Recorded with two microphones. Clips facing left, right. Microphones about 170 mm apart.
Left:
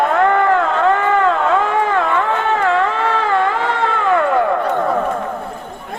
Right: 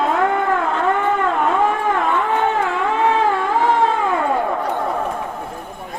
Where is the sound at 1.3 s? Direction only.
85° left.